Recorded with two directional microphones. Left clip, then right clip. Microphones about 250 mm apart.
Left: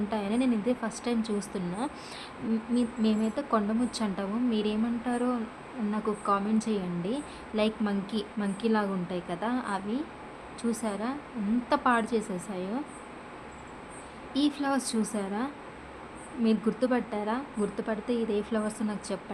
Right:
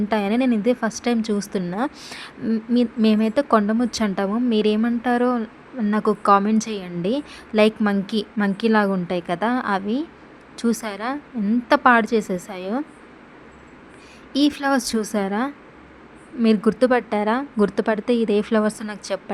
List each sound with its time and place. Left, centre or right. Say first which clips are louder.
0.1 s a woman's voice: right 9 dB; right
14.3 s a woman's voice: right 9 dB; right